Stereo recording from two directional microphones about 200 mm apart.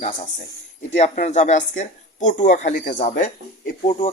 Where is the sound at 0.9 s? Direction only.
35° left (ahead or behind).